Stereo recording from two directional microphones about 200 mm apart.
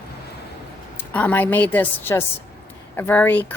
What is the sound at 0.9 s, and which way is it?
A woman's voice, 10° left (ahead or behind).